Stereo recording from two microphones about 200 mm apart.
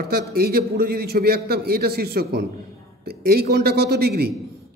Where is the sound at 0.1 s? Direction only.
50° right (ahead or behind).